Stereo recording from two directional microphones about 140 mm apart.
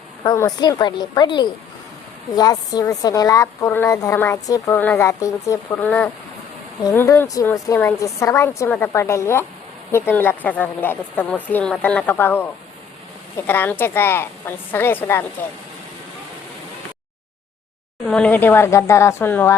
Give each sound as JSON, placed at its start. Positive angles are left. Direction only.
{"t": 0.3, "sound": "a woman's voice", "side_deg": 25}
{"t": 13.5, "sound": "a woman's voice", "side_deg": 15}
{"t": 18.1, "sound": "a woman's voice", "side_deg": 10}